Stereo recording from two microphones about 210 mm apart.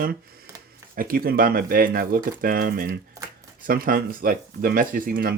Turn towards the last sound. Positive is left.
turn(degrees=-45)  # may be behind; listen again after turning